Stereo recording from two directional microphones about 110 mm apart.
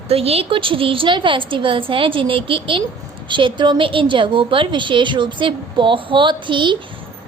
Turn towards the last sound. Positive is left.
turn(degrees=-50)  # may be behind; listen again after turning